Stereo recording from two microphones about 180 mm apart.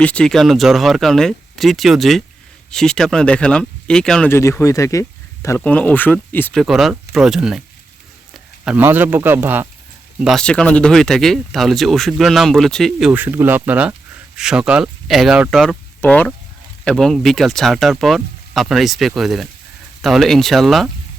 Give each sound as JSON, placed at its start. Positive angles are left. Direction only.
{"t": 0.0, "sound": "speech", "side_deg": 5}
{"t": 6.6, "sound": "speech", "side_deg": 0}
{"t": 10.2, "sound": "speech", "side_deg": 0}